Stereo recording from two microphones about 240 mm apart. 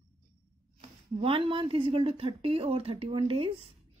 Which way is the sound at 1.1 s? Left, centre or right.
Right.